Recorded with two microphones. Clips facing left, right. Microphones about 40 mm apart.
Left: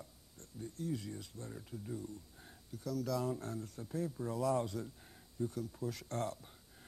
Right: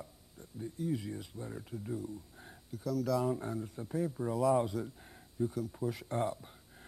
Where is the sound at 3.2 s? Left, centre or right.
Centre.